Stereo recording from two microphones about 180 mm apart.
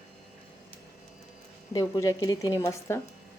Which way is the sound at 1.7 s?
20° left (ahead or behind).